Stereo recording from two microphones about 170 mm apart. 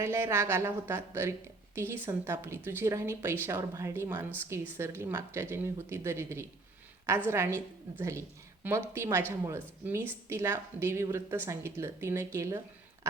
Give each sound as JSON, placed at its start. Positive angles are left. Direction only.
{"t": 0.0, "sound": "a woman's voice", "side_deg": -15}